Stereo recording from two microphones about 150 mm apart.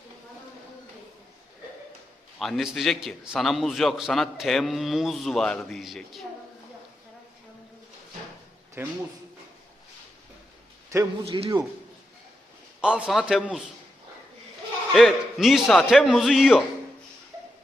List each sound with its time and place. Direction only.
2.4 s a man's voice: centre (ahead or behind)
8.8 s speech: 15° right (ahead or behind)
10.9 s a man's voice: 20° right (ahead or behind)
11.3 s a man's voice: 35° right (ahead or behind)
12.8 s a man's voice: 5° right (ahead or behind)
14.9 s a man's voice: centre (ahead or behind)